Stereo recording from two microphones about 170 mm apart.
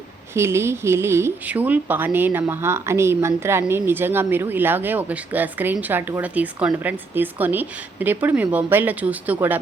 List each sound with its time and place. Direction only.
0.3 s speech: 15° right (ahead or behind)